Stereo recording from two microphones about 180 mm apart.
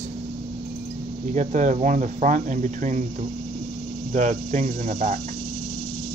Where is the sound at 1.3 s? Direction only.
45° right (ahead or behind).